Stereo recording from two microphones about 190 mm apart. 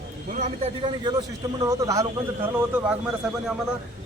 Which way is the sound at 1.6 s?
15° right (ahead or behind).